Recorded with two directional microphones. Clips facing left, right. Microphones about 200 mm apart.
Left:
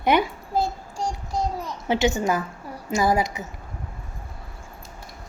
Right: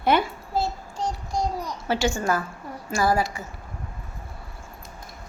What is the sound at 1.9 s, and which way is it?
A woman's voice, 20° left (ahead or behind).